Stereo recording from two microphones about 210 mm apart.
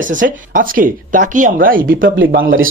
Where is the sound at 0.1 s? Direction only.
40° right (ahead or behind).